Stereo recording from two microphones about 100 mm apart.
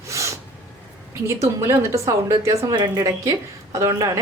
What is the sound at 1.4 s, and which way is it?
A woman's voice, 30° right (ahead or behind).